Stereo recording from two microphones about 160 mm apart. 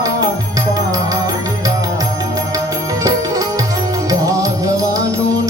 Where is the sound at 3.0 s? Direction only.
20° right (ahead or behind).